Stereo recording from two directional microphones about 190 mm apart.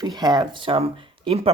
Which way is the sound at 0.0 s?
20° right (ahead or behind).